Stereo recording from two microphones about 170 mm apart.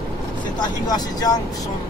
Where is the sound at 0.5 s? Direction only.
25° left (ahead or behind).